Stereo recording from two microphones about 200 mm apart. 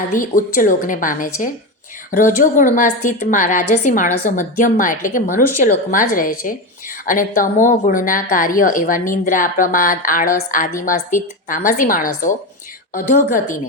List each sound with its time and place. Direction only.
0.1 s a woman's voice: 40° left (ahead or behind)